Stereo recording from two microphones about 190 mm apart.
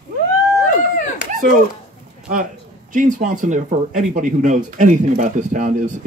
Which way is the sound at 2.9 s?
45° right (ahead or behind).